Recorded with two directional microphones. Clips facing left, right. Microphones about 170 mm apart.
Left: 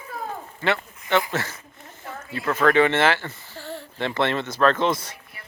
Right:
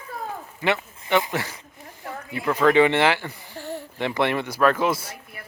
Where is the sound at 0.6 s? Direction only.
15° right (ahead or behind).